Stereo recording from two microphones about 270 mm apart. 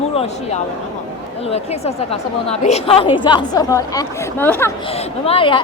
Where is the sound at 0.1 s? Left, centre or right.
Left.